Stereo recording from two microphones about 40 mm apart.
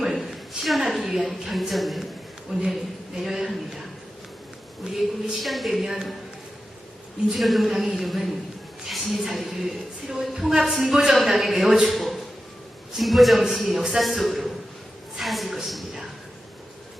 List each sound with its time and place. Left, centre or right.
0.2 s a sound: centre
0.9 s a man's voice: centre
2.5 s a woman's voice: centre
4.8 s speech: right
5.3 s a man's voice: centre
5.8 s a woman's voice: centre
7.3 s a man's voice: centre
11.9 s a sound: centre
13.0 s a man's voice: centre